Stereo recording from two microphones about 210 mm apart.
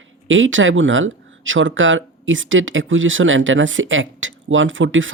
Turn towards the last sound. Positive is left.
turn(degrees=-65)  # may be behind; listen again after turning